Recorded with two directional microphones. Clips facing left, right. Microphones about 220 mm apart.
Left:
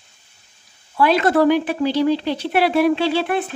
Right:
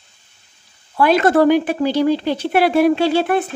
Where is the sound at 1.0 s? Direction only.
45° right (ahead or behind).